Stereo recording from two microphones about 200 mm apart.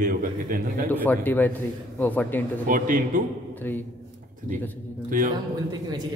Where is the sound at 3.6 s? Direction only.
10° left (ahead or behind).